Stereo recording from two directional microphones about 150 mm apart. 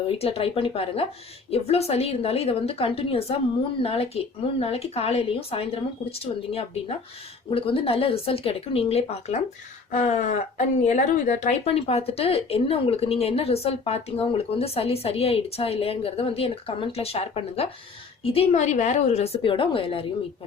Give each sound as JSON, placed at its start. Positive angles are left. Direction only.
{"t": 0.2, "sound": "speech", "side_deg": 40}